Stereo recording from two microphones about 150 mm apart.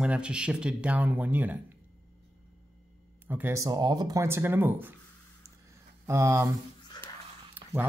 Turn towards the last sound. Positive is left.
turn(degrees=-10)  # may be behind; listen again after turning